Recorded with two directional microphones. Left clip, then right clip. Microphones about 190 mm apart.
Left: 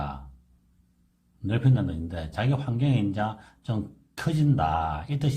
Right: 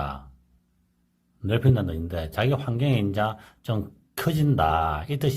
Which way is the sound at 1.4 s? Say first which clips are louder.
Right 4 dB; 30° right (ahead or behind).